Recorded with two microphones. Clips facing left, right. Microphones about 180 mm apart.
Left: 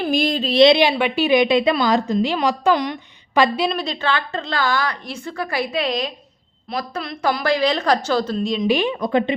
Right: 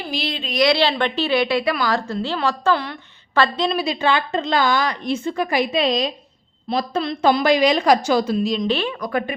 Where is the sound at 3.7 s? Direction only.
5° right (ahead or behind).